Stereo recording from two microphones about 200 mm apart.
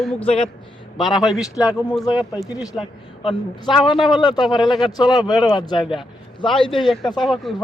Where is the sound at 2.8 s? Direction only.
25° left (ahead or behind).